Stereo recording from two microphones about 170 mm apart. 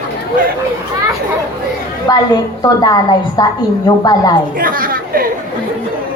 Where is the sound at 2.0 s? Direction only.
20° left (ahead or behind).